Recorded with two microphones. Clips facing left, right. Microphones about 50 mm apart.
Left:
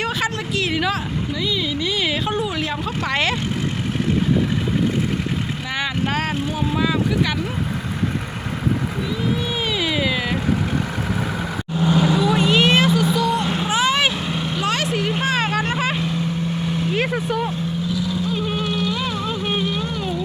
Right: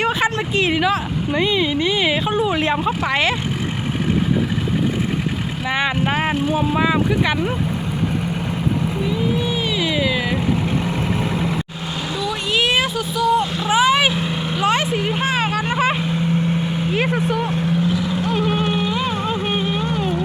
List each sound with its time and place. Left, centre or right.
0.0 s a sound: centre
1.3 s speech: right
3.0 s speech: centre
5.7 s speech: right
9.7 s cat: centre
12.3 s speech: centre
13.7 s vehicle: centre
14.8 s speech: centre
15.2 s vehicle: centre
17.5 s vehicle: right
19.6 s music: right